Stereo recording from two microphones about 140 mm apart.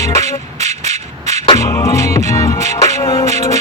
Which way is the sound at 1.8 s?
25° left (ahead or behind).